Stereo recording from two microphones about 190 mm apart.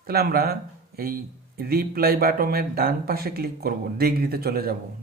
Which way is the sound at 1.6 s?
50° right (ahead or behind).